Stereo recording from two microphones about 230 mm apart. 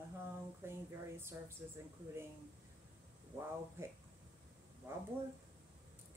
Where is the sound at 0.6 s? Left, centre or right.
Centre.